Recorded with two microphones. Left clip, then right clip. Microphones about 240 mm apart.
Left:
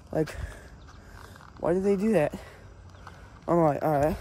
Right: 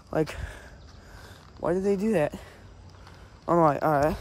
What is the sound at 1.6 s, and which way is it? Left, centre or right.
Speech, centre.